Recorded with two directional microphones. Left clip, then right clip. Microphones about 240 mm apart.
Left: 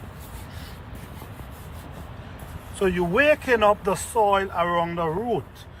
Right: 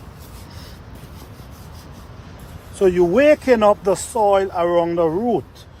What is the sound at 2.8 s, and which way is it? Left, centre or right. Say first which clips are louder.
Speech: right 7 dB; right.